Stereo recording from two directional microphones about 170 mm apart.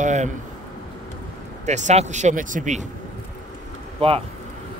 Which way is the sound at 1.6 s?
45° right (ahead or behind).